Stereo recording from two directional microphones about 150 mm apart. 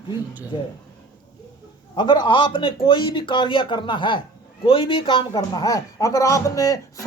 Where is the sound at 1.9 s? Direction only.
30° left (ahead or behind).